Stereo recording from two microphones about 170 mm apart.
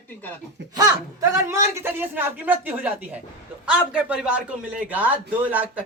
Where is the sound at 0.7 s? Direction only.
20° right (ahead or behind).